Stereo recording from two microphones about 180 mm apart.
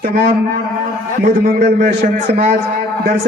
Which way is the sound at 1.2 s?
55° right (ahead or behind).